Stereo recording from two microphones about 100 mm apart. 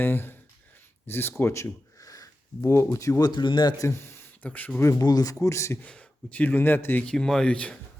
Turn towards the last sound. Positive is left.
turn(degrees=10)  # may be behind; listen again after turning